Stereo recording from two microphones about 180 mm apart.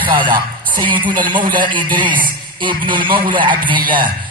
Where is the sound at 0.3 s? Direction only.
25° right (ahead or behind).